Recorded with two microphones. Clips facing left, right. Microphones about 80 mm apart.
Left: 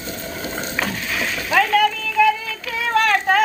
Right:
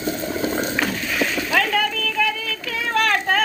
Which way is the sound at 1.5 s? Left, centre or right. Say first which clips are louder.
Left 8 dB; centre.